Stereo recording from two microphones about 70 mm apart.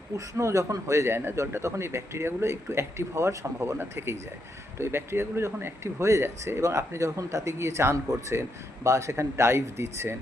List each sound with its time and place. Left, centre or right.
0.3 s speech: right